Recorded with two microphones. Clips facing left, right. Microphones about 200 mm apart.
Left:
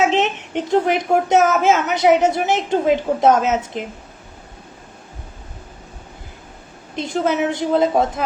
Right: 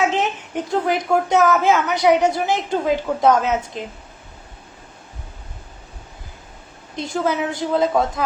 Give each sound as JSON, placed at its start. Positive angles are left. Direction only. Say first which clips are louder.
{"t": 0.0, "sound": "a child's voice", "louder": "left 3 dB", "side_deg": 20}
{"t": 6.9, "sound": "a child's voice", "louder": "left 2 dB", "side_deg": 25}